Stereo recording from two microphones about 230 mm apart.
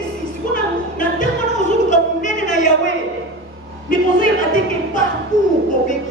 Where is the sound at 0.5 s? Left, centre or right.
Left.